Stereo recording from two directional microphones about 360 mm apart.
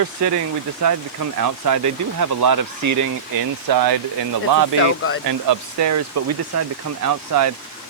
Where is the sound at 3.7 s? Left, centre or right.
Right.